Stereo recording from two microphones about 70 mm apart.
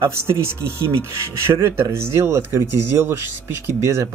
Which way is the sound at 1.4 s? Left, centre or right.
Right.